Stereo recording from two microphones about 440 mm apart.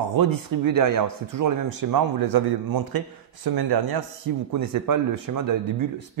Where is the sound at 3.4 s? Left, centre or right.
Right.